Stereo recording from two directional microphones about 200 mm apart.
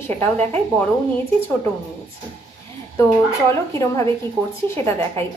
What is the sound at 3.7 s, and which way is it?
A woman's voice, 15° left (ahead or behind).